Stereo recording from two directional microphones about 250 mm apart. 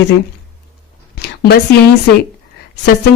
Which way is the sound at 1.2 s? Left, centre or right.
Left.